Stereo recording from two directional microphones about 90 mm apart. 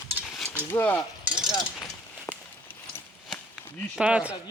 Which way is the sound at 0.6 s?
20° left (ahead or behind).